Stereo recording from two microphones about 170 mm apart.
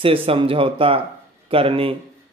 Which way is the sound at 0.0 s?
30° right (ahead or behind).